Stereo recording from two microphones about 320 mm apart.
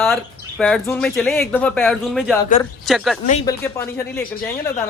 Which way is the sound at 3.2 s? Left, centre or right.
Left.